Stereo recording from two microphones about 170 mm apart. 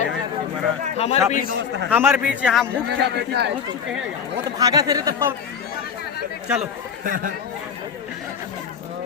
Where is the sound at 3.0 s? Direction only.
75° right (ahead or behind).